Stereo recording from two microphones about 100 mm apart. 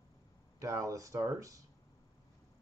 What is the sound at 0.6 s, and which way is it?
Speech, 35° right (ahead or behind).